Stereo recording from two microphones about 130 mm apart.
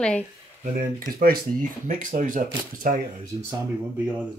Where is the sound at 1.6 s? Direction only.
90° right.